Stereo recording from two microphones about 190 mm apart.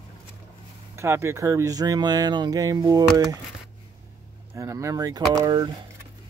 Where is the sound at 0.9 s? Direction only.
15° right (ahead or behind).